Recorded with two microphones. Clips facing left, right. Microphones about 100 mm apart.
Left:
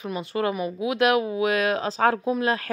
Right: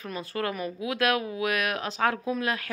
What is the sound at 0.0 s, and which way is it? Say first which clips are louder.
Speech: left 5 dB; 20° left (ahead or behind).